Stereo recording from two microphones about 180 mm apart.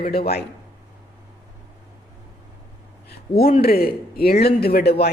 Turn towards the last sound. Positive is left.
turn(degrees=60)  # may be behind; listen again after turning